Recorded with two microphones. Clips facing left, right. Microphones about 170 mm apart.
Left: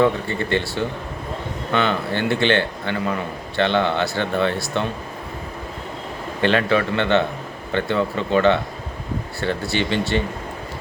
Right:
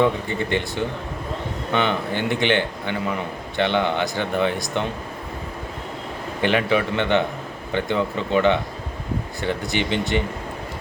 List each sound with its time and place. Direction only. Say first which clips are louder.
0.0 s a man's voice: left 1 dB; 15° right (ahead or behind)
6.4 s a man's voice: left 2 dB; 15° right (ahead or behind)